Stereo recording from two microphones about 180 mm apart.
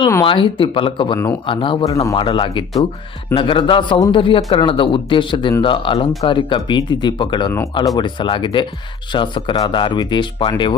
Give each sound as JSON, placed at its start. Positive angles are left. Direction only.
{"t": 0.3, "sound": "a man's voice", "side_deg": 30}